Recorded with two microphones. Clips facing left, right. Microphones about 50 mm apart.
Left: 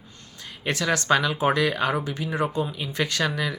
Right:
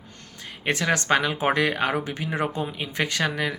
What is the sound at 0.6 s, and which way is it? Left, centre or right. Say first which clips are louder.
Speech: right 1 dB; right.